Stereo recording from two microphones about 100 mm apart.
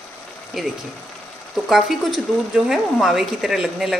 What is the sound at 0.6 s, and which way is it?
Speech, 5° right (ahead or behind).